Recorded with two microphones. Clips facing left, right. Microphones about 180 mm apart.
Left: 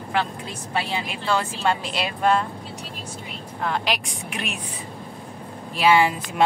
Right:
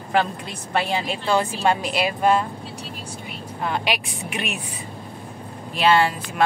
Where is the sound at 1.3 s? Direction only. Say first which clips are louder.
Right 3 dB; 15° right (ahead or behind).